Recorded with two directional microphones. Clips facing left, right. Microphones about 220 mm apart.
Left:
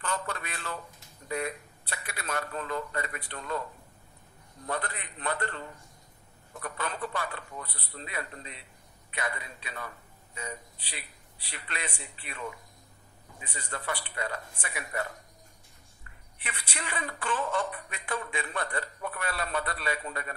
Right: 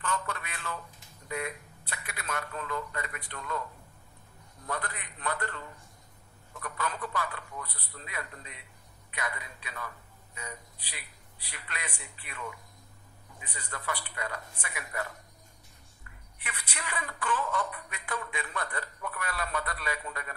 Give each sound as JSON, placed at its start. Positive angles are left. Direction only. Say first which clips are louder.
{"t": 0.0, "sound": "a sound", "louder": "left 1 dB", "side_deg": 35}
{"t": 1.3, "sound": "a man's voice", "louder": "left 3 dB", "side_deg": 35}
{"t": 4.6, "sound": "a woman's voice", "louder": "left 2 dB", "side_deg": 30}
{"t": 6.6, "sound": "a woman's voice", "louder": "left 1 dB", "side_deg": 30}